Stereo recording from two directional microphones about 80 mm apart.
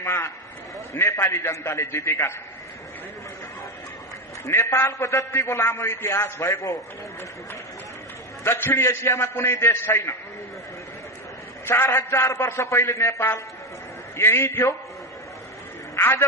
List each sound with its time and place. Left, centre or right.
0.0 s a sound: left
0.9 s a man's voice: left
4.5 s a man's voice: left
8.5 s a man's voice: left
11.6 s a man's voice: left
16.0 s a man's voice: left